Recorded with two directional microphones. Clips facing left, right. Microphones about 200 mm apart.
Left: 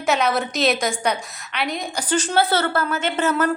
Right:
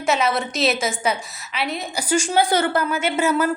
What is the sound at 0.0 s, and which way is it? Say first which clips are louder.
A woman's voice: even; centre (ahead or behind).